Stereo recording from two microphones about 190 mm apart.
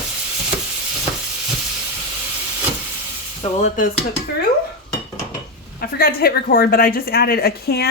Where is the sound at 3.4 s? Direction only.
35° left (ahead or behind).